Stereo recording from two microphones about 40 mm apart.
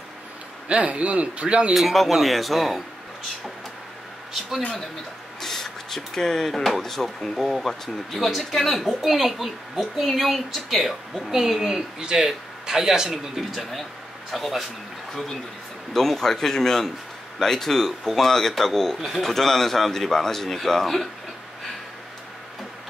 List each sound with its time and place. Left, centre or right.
0.7 s speech: right
1.7 s speech: centre
4.3 s speech: centre
5.4 s speech: centre
12.0 s speech: right
12.3 s speech: centre
13.6 s speech: centre
15.9 s a man's voice: centre
18.9 s speech: centre
19.2 s a man's voice: centre